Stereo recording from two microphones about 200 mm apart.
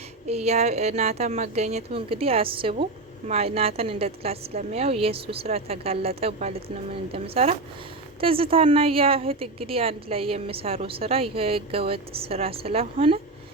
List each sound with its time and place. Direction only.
0.3 s a woman's voice: 30° right (ahead or behind)